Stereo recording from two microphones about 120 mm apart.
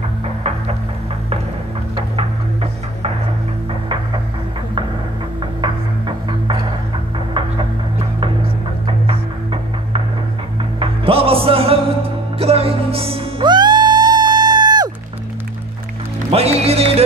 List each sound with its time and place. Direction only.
2.1 s music: 55° right (ahead or behind)
5.6 s music: 45° right (ahead or behind)
8.8 s music: 50° right (ahead or behind)
13.4 s music: 35° right (ahead or behind)
16.3 s music: 55° right (ahead or behind)